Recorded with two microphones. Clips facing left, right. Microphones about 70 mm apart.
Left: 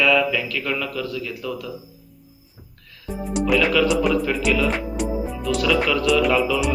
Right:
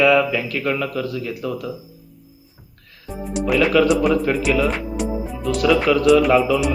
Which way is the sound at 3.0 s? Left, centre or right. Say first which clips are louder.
Even; centre.